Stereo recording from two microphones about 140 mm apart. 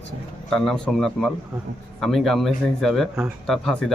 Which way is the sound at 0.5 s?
Centre (ahead or behind).